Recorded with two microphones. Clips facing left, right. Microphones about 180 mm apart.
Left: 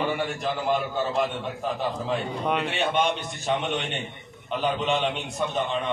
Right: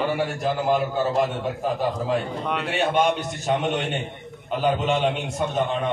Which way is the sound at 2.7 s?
45° right (ahead or behind).